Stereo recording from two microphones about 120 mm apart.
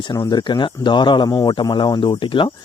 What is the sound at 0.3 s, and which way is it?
Speech, 40° left (ahead or behind).